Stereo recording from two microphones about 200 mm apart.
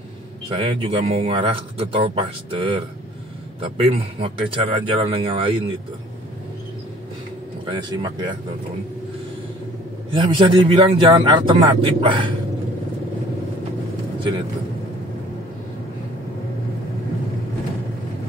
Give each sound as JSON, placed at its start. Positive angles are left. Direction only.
{"t": 0.5, "sound": "speech", "side_deg": -30}
{"t": 7.6, "sound": "speech", "side_deg": -25}
{"t": 10.1, "sound": "speech", "side_deg": -25}